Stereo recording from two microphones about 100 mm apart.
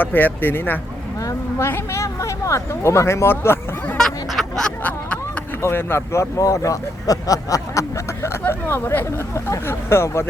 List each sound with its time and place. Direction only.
0.0 s speech: 20° left (ahead or behind)
1.2 s speech: 30° left (ahead or behind)
3.9 s a sound: centre (ahead or behind)
4.8 s snicker: 15° left (ahead or behind)
5.6 s speech: 25° left (ahead or behind)